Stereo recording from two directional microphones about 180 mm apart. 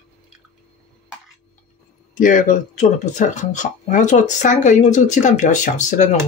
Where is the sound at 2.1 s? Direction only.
45° left (ahead or behind).